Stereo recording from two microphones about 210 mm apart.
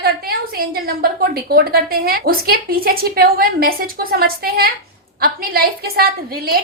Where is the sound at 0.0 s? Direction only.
45° right (ahead or behind).